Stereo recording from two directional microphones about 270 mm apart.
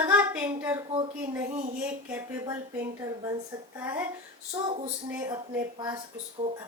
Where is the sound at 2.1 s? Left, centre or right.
Centre.